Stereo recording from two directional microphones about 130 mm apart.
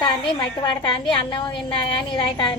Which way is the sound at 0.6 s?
40° left (ahead or behind).